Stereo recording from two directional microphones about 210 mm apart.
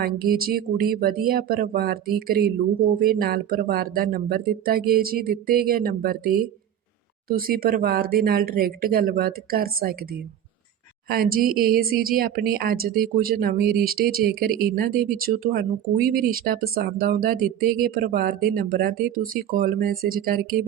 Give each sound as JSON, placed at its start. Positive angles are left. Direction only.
{"t": 0.0, "sound": "a woman's voice", "side_deg": -45}